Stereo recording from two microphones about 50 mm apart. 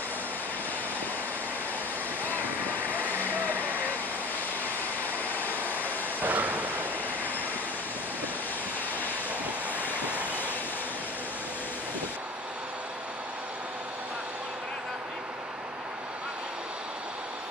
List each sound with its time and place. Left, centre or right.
2.9 s vehicle: right
5.3 s vehicle: left
6.2 s waves: right
9.8 s train: left